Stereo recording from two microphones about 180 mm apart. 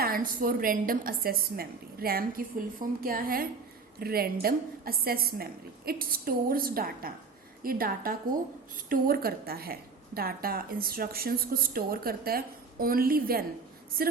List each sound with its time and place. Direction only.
0.0 s a woman's voice: 50° right (ahead or behind)